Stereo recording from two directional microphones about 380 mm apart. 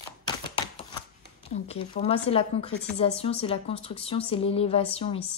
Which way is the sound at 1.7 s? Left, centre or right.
Centre.